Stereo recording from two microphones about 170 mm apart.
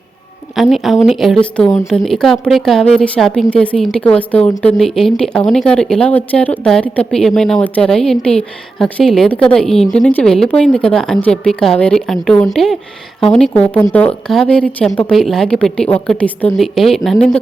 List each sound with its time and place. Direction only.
0.5 s a woman's voice: centre (ahead or behind)
4.4 s a woman's voice: 25° left (ahead or behind)
4.6 s speech: centre (ahead or behind)